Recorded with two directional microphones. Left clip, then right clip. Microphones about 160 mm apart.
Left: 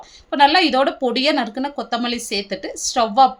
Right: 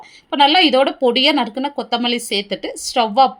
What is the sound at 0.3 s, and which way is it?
Speech, 15° right (ahead or behind).